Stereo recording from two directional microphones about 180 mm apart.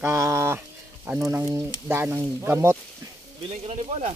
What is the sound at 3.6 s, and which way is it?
Speech, 35° right (ahead or behind).